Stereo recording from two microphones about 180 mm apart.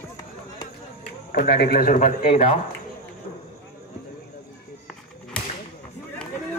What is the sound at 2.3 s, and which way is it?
Speech, 35° left (ahead or behind).